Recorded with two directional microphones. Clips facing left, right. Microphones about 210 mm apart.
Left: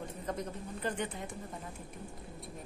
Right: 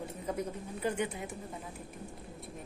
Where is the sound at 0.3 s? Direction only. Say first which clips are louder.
Right 2 dB; 10° right (ahead or behind).